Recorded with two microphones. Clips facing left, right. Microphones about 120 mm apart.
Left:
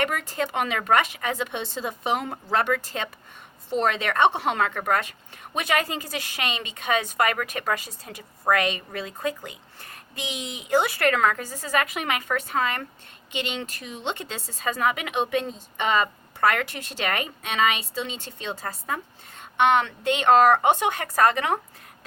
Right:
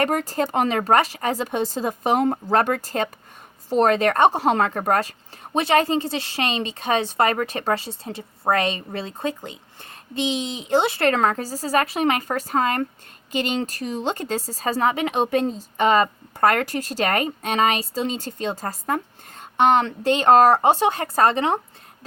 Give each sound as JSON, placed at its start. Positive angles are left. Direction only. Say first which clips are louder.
{"t": 0.0, "sound": "a woman's voice", "louder": "right 5 dB", "side_deg": -40}